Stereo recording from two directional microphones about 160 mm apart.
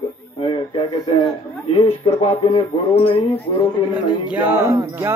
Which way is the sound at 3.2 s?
15° left (ahead or behind).